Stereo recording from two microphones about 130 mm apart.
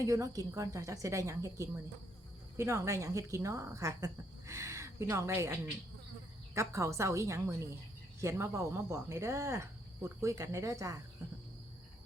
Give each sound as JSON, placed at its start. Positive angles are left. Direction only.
{"t": 0.0, "sound": "speech", "side_deg": -25}